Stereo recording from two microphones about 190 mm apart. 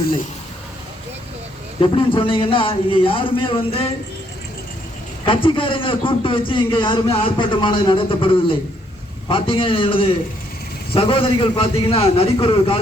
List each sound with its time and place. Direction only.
1.8 s a man's voice: 25° left (ahead or behind)
5.2 s a man's voice: 25° left (ahead or behind)